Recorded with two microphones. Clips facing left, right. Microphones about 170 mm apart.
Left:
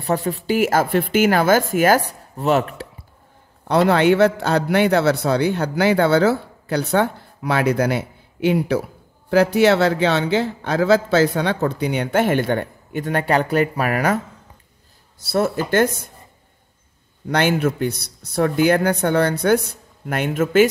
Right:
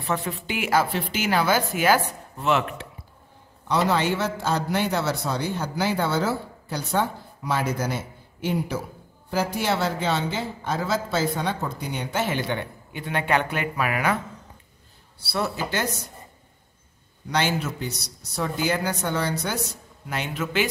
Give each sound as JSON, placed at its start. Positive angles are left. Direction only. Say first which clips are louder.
{"t": 0.0, "sound": "speech", "louder": "left 6 dB", "side_deg": 35}
{"t": 3.6, "sound": "a man's voice", "louder": "left 7 dB", "side_deg": 60}
{"t": 17.3, "sound": "speech", "louder": "left 7 dB", "side_deg": 55}